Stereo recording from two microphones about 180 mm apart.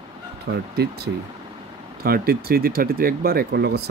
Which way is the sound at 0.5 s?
60° right (ahead or behind).